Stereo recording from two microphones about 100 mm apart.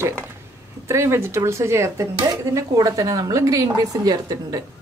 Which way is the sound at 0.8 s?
25° right (ahead or behind).